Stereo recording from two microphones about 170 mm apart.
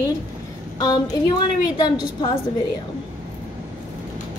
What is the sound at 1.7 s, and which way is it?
Speech, 25° left (ahead or behind).